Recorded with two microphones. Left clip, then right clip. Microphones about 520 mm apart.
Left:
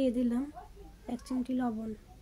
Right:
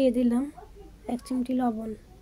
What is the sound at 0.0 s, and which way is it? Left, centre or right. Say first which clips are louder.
A woman's voice: right 7 dB; left.